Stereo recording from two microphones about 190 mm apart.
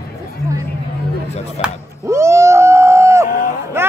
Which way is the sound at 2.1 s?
15° right (ahead or behind).